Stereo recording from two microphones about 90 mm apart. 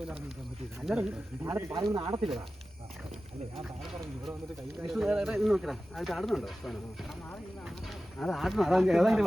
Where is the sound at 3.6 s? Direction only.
Centre (ahead or behind).